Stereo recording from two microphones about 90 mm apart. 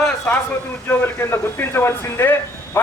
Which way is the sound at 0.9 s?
25° left (ahead or behind).